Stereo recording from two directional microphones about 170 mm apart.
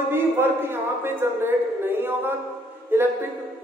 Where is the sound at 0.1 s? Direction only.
15° right (ahead or behind).